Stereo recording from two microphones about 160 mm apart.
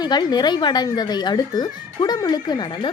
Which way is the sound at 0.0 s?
25° left (ahead or behind).